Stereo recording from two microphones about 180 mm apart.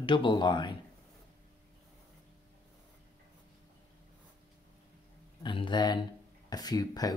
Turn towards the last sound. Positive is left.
turn(degrees=20)  # may be behind; listen again after turning